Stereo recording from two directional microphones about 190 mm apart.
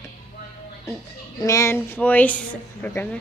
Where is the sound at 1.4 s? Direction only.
15° left (ahead or behind).